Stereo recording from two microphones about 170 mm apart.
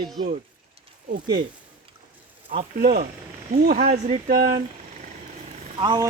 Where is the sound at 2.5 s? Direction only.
55° right (ahead or behind).